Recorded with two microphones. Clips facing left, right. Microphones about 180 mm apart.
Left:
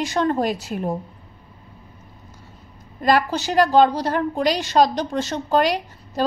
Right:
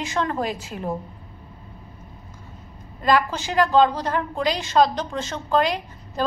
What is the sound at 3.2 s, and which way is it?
A woman's voice, 40° left (ahead or behind).